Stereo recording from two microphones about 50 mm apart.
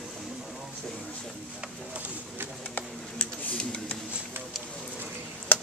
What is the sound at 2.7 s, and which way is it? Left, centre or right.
Typing, left.